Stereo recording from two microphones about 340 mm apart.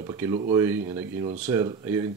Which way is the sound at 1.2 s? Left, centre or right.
Centre.